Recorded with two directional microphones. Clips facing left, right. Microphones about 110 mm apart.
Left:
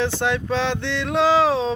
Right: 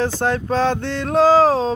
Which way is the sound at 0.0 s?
40° right (ahead or behind).